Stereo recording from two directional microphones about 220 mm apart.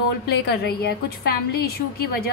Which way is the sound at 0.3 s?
45° left (ahead or behind).